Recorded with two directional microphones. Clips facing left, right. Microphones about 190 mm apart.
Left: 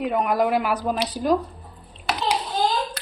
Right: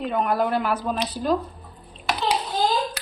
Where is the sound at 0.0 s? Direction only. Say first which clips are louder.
Left 2 dB; 10° left (ahead or behind).